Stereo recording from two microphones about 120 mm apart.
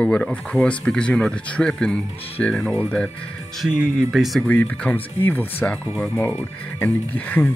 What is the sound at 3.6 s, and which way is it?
Speech, 5° right (ahead or behind).